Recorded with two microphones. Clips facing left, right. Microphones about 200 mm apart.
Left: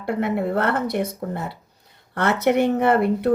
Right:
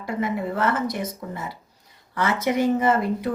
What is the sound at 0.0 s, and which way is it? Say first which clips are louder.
Speech: left 3 dB; 60° left (ahead or behind).